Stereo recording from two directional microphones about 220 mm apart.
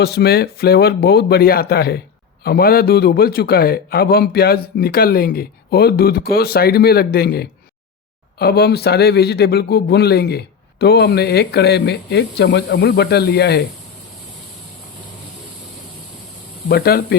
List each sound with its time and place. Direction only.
0.0 s speech: 45° left (ahead or behind)
16.6 s speech: 45° left (ahead or behind)